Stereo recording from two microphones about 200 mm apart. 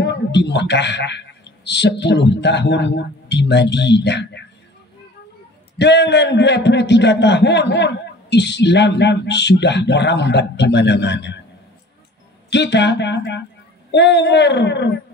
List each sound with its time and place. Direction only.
0.0 s a man's voice: 60° left (ahead or behind)
5.8 s a man's voice: 60° left (ahead or behind)
12.4 s a man's voice: 60° left (ahead or behind)